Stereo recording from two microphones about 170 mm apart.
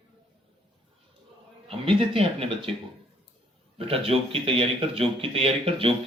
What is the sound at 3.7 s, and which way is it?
A man's voice, 35° right (ahead or behind).